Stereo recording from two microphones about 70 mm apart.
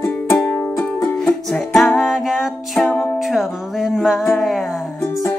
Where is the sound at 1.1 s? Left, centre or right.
Centre.